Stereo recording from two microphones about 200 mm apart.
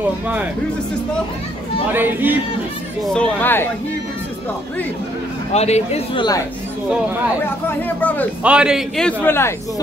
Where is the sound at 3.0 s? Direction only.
5° left (ahead or behind).